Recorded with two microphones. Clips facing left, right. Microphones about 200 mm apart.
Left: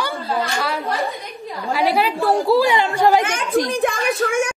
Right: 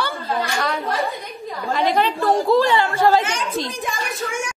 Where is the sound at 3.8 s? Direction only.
60° left (ahead or behind).